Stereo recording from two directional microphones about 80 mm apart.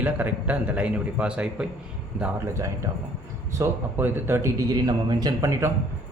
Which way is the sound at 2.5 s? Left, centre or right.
Right.